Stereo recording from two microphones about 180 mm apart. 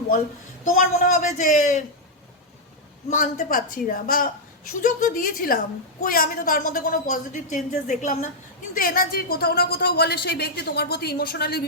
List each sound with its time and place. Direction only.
1.0 s a woman's voice: 45° left (ahead or behind)
3.1 s a woman's voice: 45° left (ahead or behind); by 11.6 s 60° left (ahead or behind)